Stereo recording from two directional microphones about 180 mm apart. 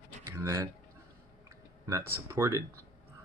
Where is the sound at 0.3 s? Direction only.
15° right (ahead or behind).